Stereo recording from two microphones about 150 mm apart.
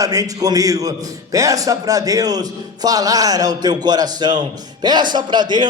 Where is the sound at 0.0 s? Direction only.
25° right (ahead or behind).